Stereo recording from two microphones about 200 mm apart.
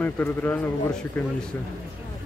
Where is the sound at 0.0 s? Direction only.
10° left (ahead or behind).